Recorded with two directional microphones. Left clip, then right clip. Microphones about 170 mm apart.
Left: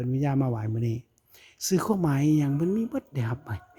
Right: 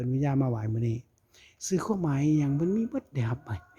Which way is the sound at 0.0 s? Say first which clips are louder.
Left 1 dB; 5° left (ahead or behind).